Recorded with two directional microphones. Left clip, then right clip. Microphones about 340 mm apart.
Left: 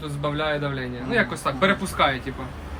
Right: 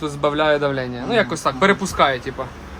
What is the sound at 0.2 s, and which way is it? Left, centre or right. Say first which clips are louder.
A woman's voice: right 8 dB; centre.